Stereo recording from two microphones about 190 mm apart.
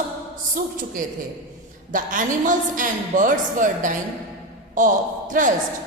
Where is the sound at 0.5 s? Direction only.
45° right (ahead or behind).